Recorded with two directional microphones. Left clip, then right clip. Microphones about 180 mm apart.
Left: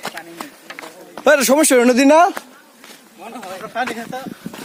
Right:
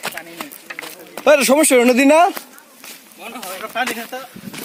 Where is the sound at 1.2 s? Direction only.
25° left (ahead or behind).